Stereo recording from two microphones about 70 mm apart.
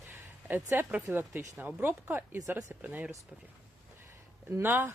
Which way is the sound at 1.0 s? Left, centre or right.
Right.